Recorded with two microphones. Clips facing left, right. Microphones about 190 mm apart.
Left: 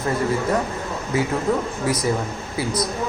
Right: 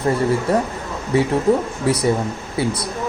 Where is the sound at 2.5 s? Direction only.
30° right (ahead or behind).